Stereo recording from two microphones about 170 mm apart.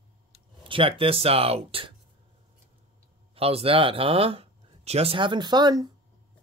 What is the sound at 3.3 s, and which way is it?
Speech, 35° right (ahead or behind).